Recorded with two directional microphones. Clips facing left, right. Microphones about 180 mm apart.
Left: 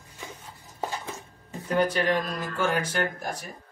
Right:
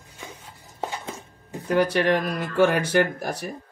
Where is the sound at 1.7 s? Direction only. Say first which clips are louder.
Right 4 dB; 70° right (ahead or behind).